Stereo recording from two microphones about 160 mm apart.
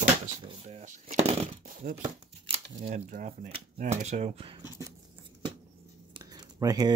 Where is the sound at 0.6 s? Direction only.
50° right (ahead or behind).